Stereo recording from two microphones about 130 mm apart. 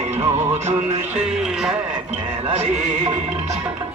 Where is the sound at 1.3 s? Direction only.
5° right (ahead or behind).